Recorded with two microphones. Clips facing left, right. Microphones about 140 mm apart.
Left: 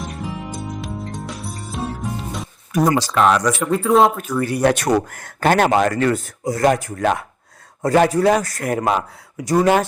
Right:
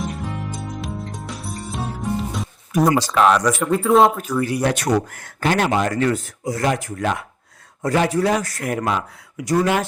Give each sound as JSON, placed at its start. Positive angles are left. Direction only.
{"t": 0.0, "sound": "music", "side_deg": 0}
{"t": 4.4, "sound": "speech", "side_deg": 50}
{"t": 6.4, "sound": "a man's voice", "side_deg": 40}